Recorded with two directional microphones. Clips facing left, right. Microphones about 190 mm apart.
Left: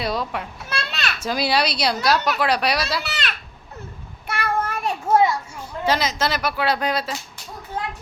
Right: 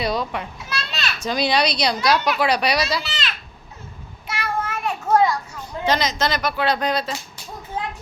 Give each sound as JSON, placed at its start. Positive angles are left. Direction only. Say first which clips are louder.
{"t": 0.0, "sound": "speech", "louder": "right 1 dB", "side_deg": 0}
{"t": 0.7, "sound": "children playing", "louder": "left 2 dB", "side_deg": 50}
{"t": 1.2, "sound": "speech", "louder": "right 1 dB", "side_deg": 5}
{"t": 3.0, "sound": "a child's voice", "louder": "left 1 dB", "side_deg": 60}
{"t": 4.3, "sound": "child singing", "louder": "left 2 dB", "side_deg": 55}
{"t": 4.7, "sound": "children playing", "louder": "right 2 dB", "side_deg": 25}
{"t": 5.5, "sound": "speech", "louder": "right 1 dB", "side_deg": 5}